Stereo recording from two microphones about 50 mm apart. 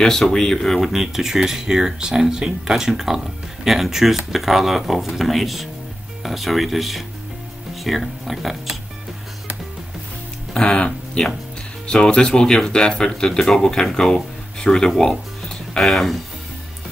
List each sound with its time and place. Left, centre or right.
0.0 s speech: centre
0.7 s speech: centre
10.5 s speech: centre
14.9 s music: centre
15.8 s speech: centre